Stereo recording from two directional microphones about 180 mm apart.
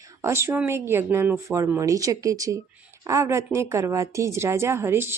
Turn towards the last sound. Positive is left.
turn(degrees=-15)  # may be behind; listen again after turning